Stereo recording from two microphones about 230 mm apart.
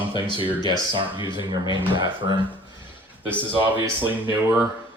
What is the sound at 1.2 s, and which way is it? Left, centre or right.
Speech, centre.